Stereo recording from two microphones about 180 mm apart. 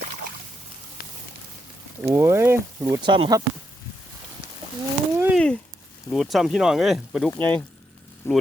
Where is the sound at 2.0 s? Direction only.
15° right (ahead or behind).